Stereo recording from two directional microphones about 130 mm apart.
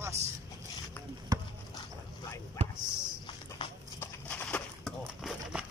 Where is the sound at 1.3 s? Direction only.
30° right (ahead or behind).